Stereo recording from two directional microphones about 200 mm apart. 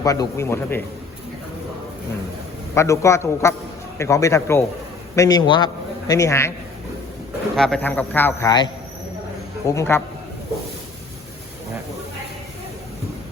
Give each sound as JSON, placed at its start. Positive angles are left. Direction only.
{"t": 0.0, "sound": "a man's voice", "side_deg": 15}
{"t": 2.7, "sound": "a man's voice", "side_deg": 15}
{"t": 7.5, "sound": "a man's voice", "side_deg": 5}